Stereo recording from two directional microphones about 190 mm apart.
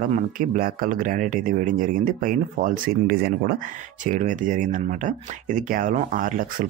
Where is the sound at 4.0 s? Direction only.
40° right (ahead or behind).